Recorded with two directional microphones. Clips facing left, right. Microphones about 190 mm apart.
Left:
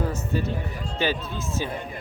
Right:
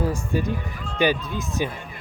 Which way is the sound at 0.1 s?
15° right (ahead or behind).